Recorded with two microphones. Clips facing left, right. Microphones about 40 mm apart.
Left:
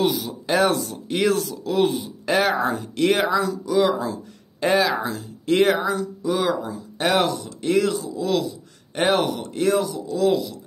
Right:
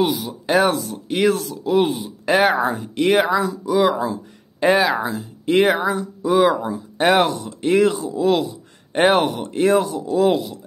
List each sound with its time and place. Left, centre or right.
0.0 s speech: centre
2.5 s speech: centre; by 10.6 s right